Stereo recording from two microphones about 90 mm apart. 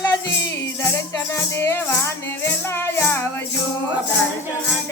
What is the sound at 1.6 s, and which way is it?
Music, 30° left (ahead or behind).